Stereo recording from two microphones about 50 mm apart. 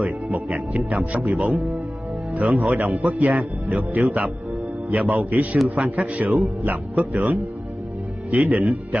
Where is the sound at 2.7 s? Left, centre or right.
Right.